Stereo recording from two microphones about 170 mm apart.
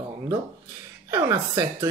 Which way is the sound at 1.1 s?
15° right (ahead or behind).